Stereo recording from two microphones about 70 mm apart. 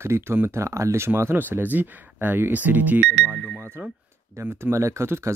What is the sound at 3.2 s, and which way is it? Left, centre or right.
Speech, centre.